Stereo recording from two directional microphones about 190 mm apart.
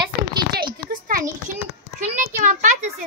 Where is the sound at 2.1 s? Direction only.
40° right (ahead or behind).